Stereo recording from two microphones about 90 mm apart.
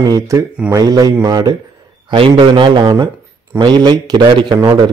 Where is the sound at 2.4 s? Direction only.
60° right (ahead or behind).